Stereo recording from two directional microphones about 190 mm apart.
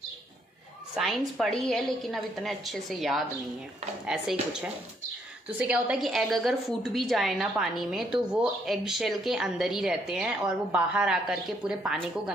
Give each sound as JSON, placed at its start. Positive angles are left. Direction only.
{"t": 0.9, "sound": "a woman's voice", "side_deg": 0}